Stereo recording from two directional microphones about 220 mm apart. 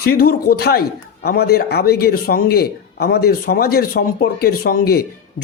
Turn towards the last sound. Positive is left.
turn(degrees=45)  # may be behind; listen again after turning